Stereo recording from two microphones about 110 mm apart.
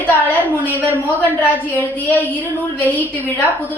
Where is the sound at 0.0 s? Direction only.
15° left (ahead or behind).